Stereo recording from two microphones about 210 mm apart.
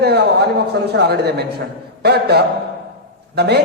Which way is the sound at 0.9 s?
50° right (ahead or behind).